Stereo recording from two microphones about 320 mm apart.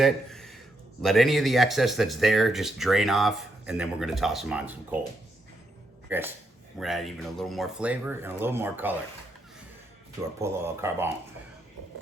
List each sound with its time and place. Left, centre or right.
0.0 s a sound: centre
1.0 s speech: centre
6.1 s speech: centre
10.4 s speech: centre